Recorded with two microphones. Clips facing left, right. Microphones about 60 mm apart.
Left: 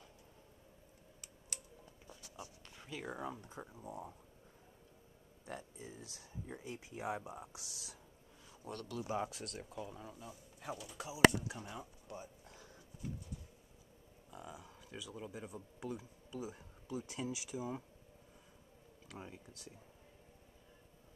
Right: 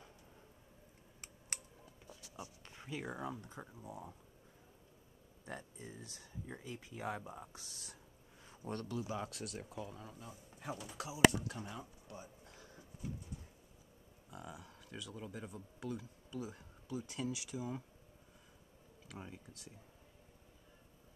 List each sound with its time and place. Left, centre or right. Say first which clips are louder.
2.4 s a sound: right 1 dB; right
2.9 s speech: right 1 dB; centre
5.5 s speech: even; centre
6.4 s speech: left 1 dB; centre
8.5 s a sound: right 3 dB; right
9.0 s speech: left 3 dB; centre
9.3 s speech: right 1 dB; centre
10.2 s speech: right 1 dB; centre
11.4 s speech: right 1 dB; centre
12.1 s a sound: left 2 dB; left
14.3 s speech: even; centre
19.0 s speech: even; centre